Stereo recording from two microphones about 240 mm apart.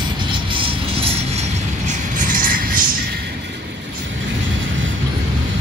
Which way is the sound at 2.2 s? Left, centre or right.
Right.